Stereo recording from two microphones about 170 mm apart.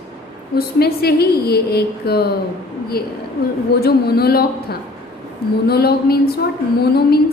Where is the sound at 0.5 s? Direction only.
65° left (ahead or behind).